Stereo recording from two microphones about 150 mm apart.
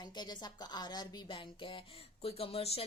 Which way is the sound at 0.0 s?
30° left (ahead or behind).